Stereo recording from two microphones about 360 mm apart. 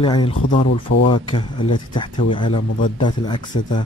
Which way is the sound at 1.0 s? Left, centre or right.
Centre.